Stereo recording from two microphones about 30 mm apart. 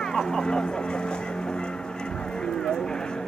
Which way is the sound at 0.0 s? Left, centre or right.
Centre.